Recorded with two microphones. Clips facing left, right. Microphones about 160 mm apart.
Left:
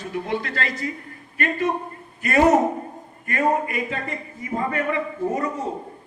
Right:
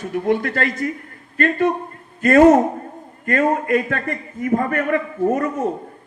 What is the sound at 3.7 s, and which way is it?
A man's voice, 60° right (ahead or behind).